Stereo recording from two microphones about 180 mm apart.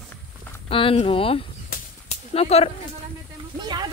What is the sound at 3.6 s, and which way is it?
Speech, 20° right (ahead or behind).